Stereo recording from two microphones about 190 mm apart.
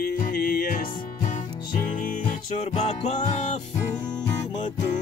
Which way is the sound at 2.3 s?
35° left (ahead or behind).